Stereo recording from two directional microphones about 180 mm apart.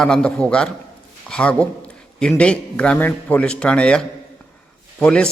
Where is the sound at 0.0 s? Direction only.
5° left (ahead or behind).